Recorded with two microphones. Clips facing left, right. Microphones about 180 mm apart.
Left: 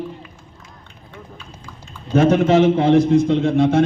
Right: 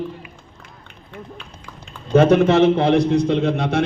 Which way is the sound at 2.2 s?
65° right (ahead or behind).